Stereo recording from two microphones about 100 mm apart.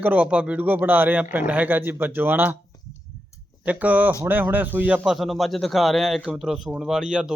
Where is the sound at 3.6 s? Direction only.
15° right (ahead or behind).